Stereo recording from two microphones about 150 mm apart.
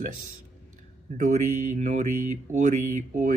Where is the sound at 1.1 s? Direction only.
60° right (ahead or behind).